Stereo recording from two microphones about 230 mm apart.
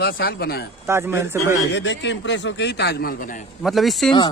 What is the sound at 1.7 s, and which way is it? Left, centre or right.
Speech, left.